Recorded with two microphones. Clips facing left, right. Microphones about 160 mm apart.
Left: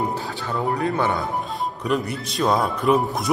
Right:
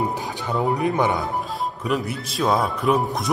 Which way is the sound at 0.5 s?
15° right (ahead or behind).